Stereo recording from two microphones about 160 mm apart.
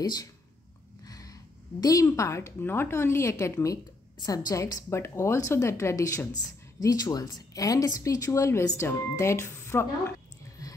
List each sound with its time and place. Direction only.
0.0 s a woman's voice: 25° left (ahead or behind)